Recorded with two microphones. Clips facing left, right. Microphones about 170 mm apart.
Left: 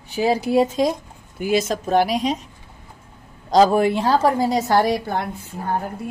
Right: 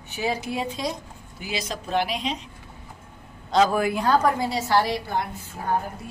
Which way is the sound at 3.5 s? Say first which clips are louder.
Left 5 dB; 30° left (ahead or behind).